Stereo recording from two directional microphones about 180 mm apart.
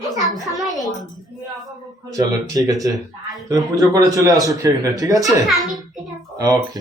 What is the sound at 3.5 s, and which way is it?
A man's voice, 20° right (ahead or behind).